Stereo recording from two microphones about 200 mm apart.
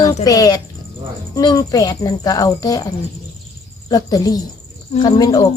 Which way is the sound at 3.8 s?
20° left (ahead or behind).